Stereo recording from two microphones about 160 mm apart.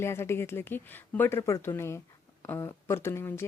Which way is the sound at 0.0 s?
15° left (ahead or behind).